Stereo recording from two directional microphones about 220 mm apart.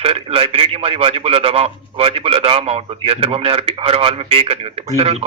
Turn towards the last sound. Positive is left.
turn(degrees=-25)  # may be behind; listen again after turning